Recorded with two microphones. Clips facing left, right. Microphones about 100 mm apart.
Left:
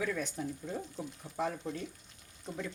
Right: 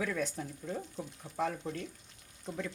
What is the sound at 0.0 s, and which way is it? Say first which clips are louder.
Speech: even; centre (ahead or behind).